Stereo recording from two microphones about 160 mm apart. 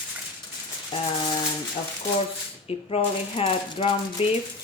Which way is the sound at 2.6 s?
40° left (ahead or behind).